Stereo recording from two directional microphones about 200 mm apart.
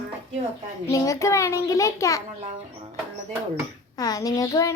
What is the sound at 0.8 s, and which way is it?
A child's voice, 15° left (ahead or behind).